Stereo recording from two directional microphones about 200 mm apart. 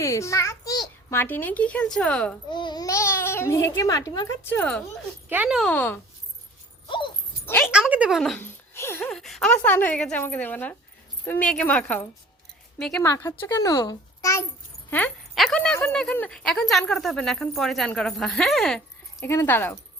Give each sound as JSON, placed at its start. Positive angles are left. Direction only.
{"t": 0.0, "sound": "a child's voice", "side_deg": 15}
{"t": 2.5, "sound": "a child's voice", "side_deg": 20}
{"t": 5.3, "sound": "speech", "side_deg": -5}
{"t": 6.8, "sound": "dog", "side_deg": 25}
{"t": 7.4, "sound": "a sound", "side_deg": 10}
{"t": 7.7, "sound": "a child's voice", "side_deg": -5}